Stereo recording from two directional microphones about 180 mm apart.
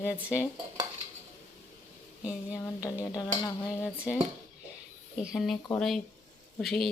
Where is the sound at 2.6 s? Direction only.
15° left (ahead or behind).